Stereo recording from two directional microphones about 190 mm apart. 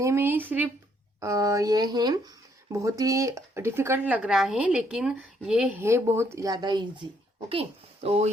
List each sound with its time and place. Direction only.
0.0 s speech: 15° right (ahead or behind); by 8.3 s 30° right (ahead or behind)